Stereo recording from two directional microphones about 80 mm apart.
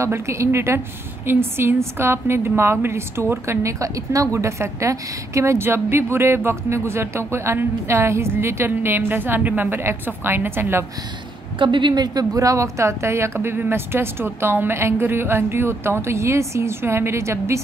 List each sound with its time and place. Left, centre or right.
0.0 s a woman's voice: right
11.5 s a woman's voice: right